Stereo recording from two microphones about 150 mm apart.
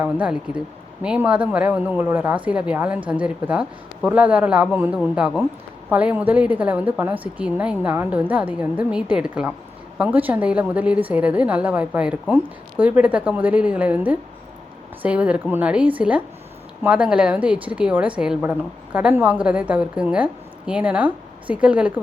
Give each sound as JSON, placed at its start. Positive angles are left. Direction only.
{"t": 0.0, "sound": "a woman's voice", "side_deg": -10}